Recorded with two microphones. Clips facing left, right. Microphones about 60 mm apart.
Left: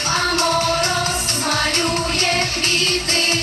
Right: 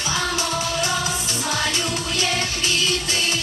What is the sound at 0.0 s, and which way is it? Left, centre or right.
Music, left.